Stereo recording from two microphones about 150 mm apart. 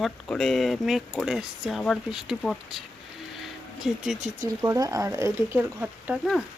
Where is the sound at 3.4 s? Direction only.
Centre (ahead or behind).